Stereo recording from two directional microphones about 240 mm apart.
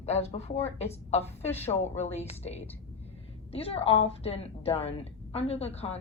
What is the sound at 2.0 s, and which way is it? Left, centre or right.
Speech, left.